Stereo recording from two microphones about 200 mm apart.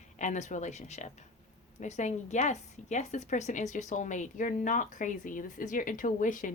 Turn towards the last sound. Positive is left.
turn(degrees=40)  # may be behind; listen again after turning